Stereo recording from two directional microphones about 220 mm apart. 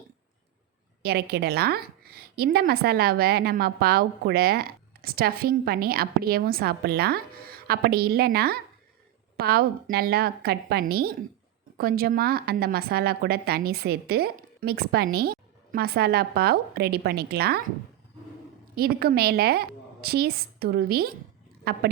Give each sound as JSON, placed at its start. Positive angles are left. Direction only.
{"t": 1.0, "sound": "a woman's voice", "side_deg": -45}
{"t": 18.8, "sound": "a woman's voice", "side_deg": -45}